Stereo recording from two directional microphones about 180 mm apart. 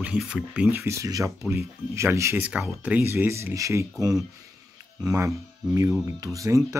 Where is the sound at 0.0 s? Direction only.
5° right (ahead or behind).